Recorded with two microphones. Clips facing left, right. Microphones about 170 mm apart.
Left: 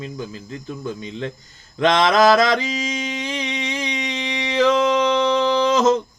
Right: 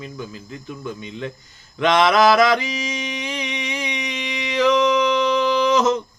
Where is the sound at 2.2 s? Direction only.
45° left (ahead or behind).